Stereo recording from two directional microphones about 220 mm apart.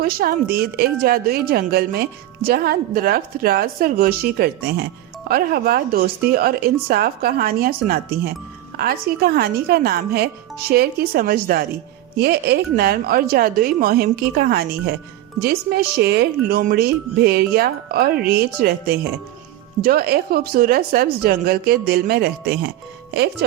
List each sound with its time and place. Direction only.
0.0 s a woman's voice: 45° right (ahead or behind)